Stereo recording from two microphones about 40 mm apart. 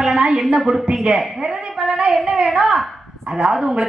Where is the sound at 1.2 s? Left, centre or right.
Centre.